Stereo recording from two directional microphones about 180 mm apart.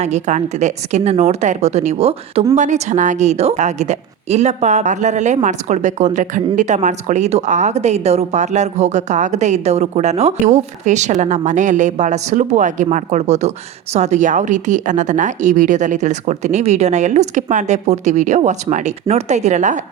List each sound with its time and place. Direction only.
0.0 s a woman's voice: 40° right (ahead or behind)